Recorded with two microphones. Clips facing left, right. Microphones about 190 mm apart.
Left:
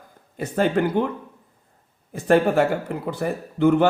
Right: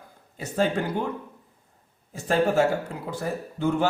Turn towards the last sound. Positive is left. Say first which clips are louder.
# left 7 dB
turn(degrees=60)  # may be behind; listen again after turning